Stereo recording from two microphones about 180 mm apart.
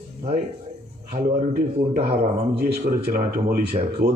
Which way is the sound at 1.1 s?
50° right (ahead or behind).